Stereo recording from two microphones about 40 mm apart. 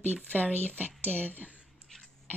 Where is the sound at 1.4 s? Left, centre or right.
Right.